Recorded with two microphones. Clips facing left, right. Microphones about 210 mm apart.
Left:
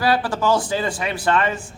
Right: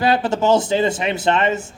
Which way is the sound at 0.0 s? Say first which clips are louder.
Right 3 dB; 20° right (ahead or behind).